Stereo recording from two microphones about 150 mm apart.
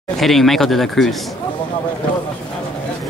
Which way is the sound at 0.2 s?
Centre (ahead or behind).